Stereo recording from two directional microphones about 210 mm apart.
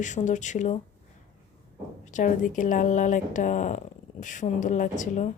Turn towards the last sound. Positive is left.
turn(degrees=35)  # may be behind; listen again after turning